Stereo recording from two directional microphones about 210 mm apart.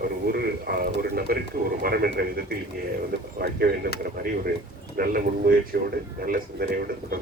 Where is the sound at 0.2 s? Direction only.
50° right (ahead or behind).